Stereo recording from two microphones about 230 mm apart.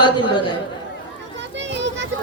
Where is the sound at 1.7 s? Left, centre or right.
Right.